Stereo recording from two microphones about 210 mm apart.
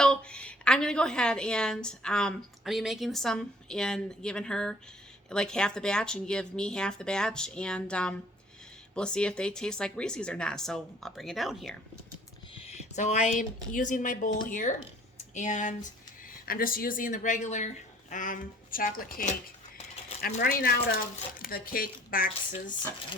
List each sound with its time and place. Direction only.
0.0 s a woman's voice: 5° left (ahead or behind)
12.6 s speech: 30° left (ahead or behind)